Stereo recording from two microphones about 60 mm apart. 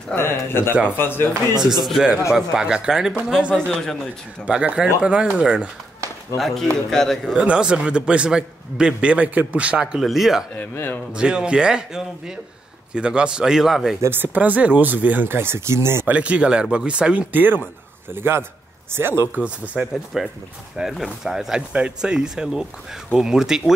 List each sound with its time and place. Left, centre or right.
0.2 s a man's voice: left
1.6 s a man's voice: centre
3.5 s speech: centre
4.5 s a man's voice: centre
6.3 s speech: centre
7.3 s a man's voice: centre
9.9 s speech: centre
10.5 s a man's voice: left
11.1 s a man's voice: centre
14.0 s speech: right
16.1 s a man's voice: right
17.3 s speech: right
19.4 s a man's voice: right
20.1 s a man's voice: centre